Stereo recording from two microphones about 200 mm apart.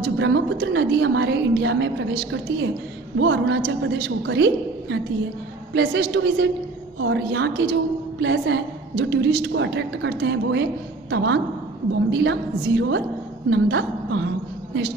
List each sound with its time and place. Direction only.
0.2 s a woman's voice: 60° right (ahead or behind)